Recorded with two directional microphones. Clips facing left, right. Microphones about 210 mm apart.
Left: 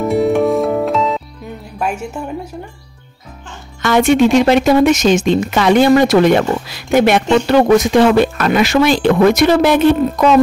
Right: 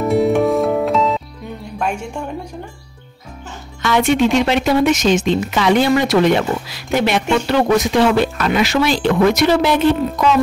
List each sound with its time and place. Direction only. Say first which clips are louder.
0.0 s music: left 1 dB; centre (ahead or behind)
1.8 s a sound: left 2 dB; 5° left (ahead or behind)
3.8 s speech: left 4 dB; 45° left (ahead or behind)